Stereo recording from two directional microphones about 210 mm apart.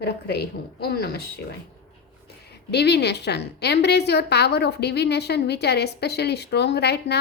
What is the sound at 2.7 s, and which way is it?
A woman's voice, 50° left (ahead or behind).